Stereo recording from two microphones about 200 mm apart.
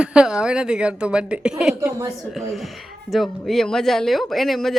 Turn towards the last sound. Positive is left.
turn(degrees=0)  # may be behind; listen again after turning